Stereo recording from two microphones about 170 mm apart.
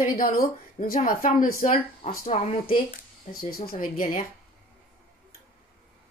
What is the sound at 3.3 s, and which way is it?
Speech, 60° left (ahead or behind).